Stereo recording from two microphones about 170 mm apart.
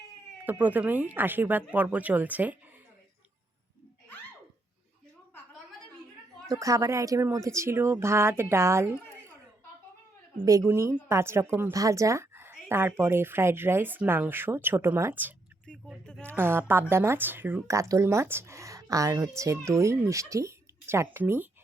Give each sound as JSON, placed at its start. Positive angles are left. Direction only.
{"t": 0.4, "sound": "speech", "side_deg": -10}
{"t": 6.5, "sound": "speech", "side_deg": -20}
{"t": 10.3, "sound": "speech", "side_deg": -15}
{"t": 15.6, "sound": "speech", "side_deg": 5}
{"t": 16.2, "sound": "speech", "side_deg": -15}